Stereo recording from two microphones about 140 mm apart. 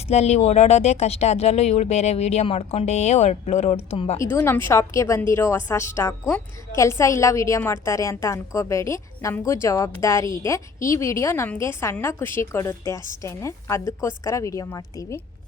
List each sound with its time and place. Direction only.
0.1 s speech: 50° left (ahead or behind)
4.2 s a woman's voice: 20° left (ahead or behind)